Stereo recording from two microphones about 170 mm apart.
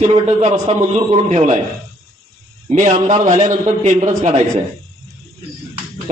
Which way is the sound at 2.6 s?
45° right (ahead or behind).